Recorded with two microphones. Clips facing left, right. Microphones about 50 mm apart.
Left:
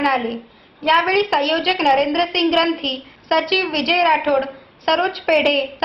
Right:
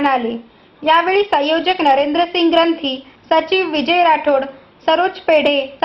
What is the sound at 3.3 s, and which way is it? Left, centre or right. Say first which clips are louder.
Speech: right 3 dB; right.